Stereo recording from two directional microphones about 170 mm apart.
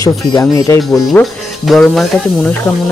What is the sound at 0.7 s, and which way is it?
Speech, centre (ahead or behind).